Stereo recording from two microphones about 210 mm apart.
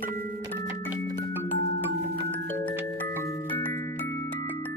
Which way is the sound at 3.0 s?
15° left (ahead or behind).